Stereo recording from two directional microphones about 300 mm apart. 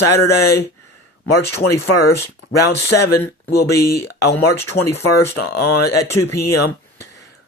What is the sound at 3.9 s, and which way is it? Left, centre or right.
Speech, left.